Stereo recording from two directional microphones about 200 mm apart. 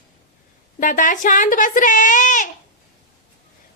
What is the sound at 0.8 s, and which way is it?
A child's voice, 40° left (ahead or behind).